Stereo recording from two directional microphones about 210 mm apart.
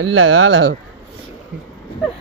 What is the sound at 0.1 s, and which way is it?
Speech, 80° right.